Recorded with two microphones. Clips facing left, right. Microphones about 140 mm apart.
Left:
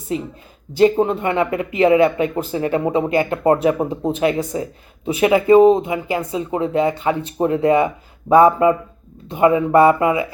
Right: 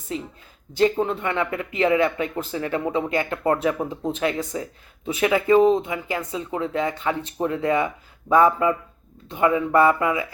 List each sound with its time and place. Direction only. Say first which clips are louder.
0.7 s speech: left 6 dB; 10° left (ahead or behind)